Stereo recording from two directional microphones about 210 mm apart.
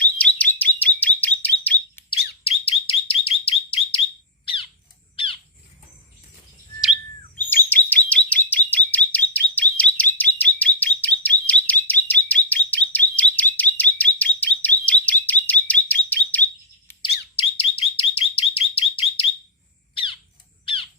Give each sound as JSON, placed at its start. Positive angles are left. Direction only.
{"t": 0.0, "sound": "bird", "side_deg": 5}
{"t": 2.4, "sound": "bird", "side_deg": 25}
{"t": 5.1, "sound": "squawk", "side_deg": 25}
{"t": 7.5, "sound": "chirp", "side_deg": 10}
{"t": 17.0, "sound": "bird", "side_deg": 25}